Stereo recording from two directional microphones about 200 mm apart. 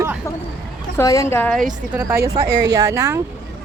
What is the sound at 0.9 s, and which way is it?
Speech, 15° left (ahead or behind).